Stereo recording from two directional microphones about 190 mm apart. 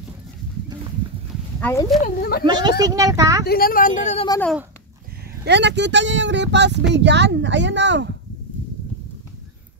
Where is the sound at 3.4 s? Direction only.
50° left (ahead or behind).